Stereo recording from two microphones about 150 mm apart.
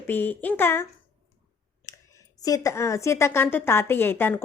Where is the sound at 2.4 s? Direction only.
20° left (ahead or behind).